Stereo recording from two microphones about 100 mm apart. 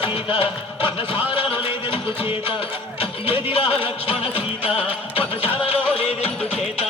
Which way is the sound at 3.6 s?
70° left (ahead or behind).